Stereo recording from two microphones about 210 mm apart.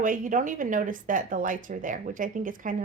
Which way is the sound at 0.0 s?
40° right (ahead or behind).